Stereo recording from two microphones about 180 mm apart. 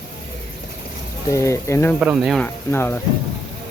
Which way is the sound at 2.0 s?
5° right (ahead or behind).